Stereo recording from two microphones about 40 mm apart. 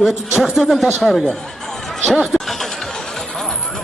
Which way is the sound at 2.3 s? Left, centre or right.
Centre.